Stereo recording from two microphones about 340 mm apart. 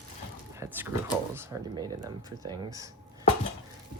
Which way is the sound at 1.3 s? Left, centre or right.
Centre.